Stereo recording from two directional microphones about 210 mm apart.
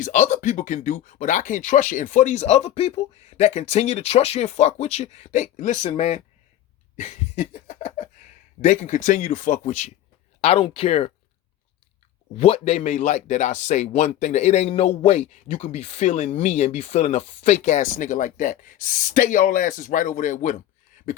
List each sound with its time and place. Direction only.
0.0 s speech: 35° left (ahead or behind)
6.9 s a sound: 35° left (ahead or behind)
8.6 s speech: 35° left (ahead or behind)
12.4 s speech: 30° left (ahead or behind)